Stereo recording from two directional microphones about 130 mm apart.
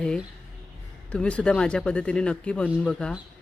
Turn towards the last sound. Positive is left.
turn(degrees=5)  # may be behind; listen again after turning